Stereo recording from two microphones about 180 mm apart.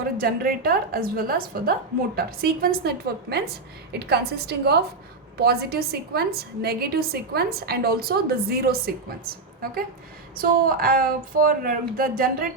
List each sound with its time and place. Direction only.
0.2 s a woman's voice: 55° right (ahead or behind)